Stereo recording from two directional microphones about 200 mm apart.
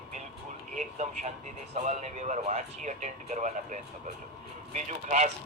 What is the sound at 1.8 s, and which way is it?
Speech, 35° right (ahead or behind).